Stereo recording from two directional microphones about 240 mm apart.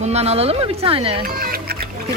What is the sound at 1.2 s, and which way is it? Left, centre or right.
Music, right.